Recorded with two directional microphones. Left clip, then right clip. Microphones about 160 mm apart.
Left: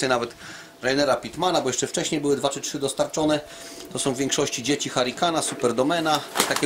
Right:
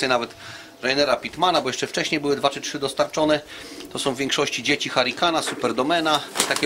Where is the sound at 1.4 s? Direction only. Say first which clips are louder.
Right 2 dB; 15° left (ahead or behind).